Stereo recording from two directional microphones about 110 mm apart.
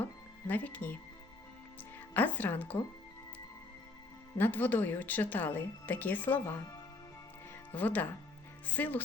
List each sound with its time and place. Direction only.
0.0 s music: 15° left (ahead or behind)
2.0 s speech: 15° left (ahead or behind)
4.4 s speech: 20° left (ahead or behind)
7.7 s speech: 15° left (ahead or behind)